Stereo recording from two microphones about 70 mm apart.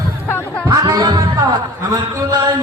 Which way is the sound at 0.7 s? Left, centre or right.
Right.